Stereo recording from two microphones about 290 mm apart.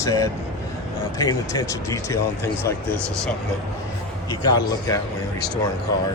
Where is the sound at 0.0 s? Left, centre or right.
Centre.